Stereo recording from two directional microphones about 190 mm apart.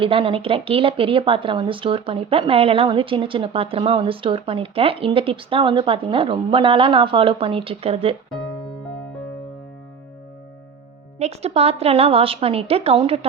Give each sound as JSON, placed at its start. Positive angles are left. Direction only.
{"t": 0.0, "sound": "speech", "side_deg": -25}
{"t": 11.2, "sound": "a woman's voice", "side_deg": -35}